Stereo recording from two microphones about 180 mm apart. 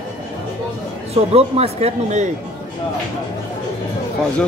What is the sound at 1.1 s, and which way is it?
Speech, 35° right (ahead or behind).